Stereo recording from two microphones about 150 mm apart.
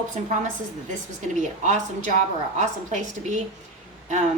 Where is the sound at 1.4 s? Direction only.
55° right (ahead or behind).